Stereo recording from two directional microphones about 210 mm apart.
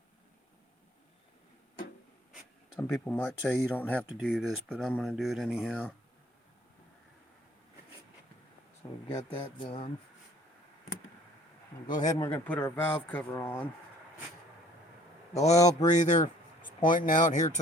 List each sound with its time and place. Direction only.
2.8 s speech: 10° left (ahead or behind)
9.0 s speech: 25° left (ahead or behind)
11.9 s speech: 20° left (ahead or behind)
15.4 s speech: 30° left (ahead or behind)